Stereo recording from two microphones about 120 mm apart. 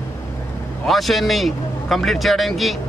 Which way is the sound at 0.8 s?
Centre (ahead or behind).